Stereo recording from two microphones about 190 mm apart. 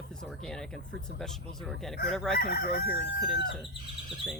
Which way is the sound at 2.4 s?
55° left (ahead or behind).